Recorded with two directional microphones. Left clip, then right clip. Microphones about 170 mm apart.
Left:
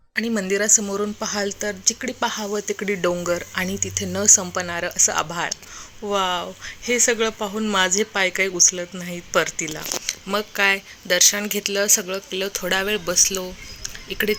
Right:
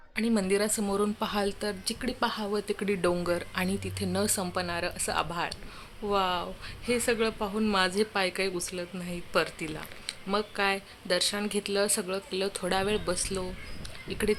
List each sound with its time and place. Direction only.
0.2 s speech: 10° left (ahead or behind)